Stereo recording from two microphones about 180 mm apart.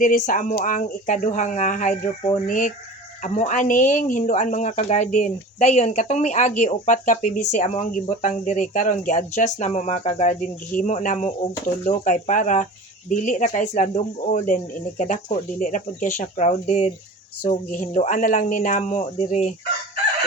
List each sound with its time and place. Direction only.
0.0 s speech: 45° left (ahead or behind)